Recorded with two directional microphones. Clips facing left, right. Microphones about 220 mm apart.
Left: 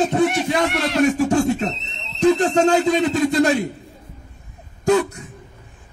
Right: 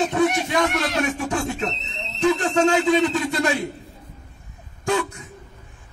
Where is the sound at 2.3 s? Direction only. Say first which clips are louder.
Left 3 dB; 40° left (ahead or behind).